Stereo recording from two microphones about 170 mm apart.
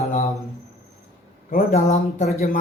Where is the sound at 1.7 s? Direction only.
40° left (ahead or behind).